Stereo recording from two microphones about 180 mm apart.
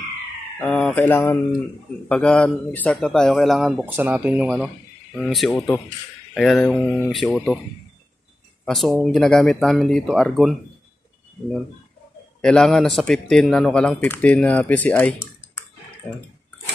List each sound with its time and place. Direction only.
0.6 s mantra: 5° left (ahead or behind)
2.0 s speech: 5° left (ahead or behind)
8.6 s speech: centre (ahead or behind)
12.4 s speech: 5° left (ahead or behind)